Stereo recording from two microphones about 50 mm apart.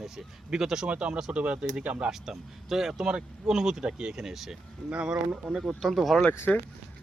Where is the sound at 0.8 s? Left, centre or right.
Right.